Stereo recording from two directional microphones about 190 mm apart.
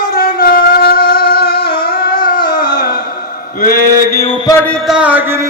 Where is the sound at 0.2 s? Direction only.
50° left (ahead or behind).